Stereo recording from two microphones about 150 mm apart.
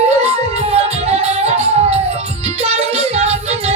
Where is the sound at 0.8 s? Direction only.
45° right (ahead or behind).